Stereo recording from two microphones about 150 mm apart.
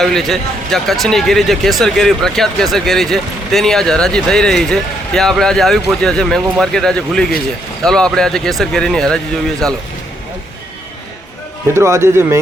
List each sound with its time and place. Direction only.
0.0 s speech: centre (ahead or behind)
11.7 s speech: 20° right (ahead or behind)